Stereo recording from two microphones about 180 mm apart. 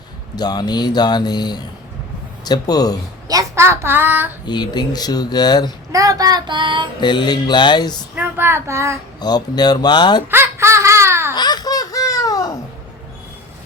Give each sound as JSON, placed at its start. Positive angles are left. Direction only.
{"t": 0.3, "sound": "speech", "side_deg": 20}
{"t": 3.2, "sound": "a child's voice", "side_deg": -20}
{"t": 4.4, "sound": "speech", "side_deg": 25}
{"t": 5.9, "sound": "child singing", "side_deg": -20}
{"t": 7.0, "sound": "speech", "side_deg": 25}
{"t": 8.1, "sound": "a child's voice", "side_deg": -10}
{"t": 9.2, "sound": "speech", "side_deg": 20}
{"t": 10.3, "sound": "a sound", "side_deg": -15}
{"t": 11.3, "sound": "laughter", "side_deg": 25}